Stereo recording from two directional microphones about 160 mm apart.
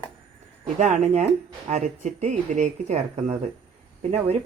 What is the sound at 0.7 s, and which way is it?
Speech, 50° right (ahead or behind).